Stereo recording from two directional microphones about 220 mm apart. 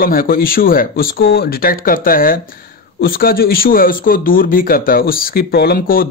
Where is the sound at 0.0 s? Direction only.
40° left (ahead or behind).